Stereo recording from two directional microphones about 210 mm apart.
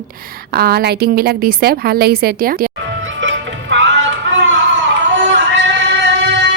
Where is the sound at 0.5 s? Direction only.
50° right (ahead or behind).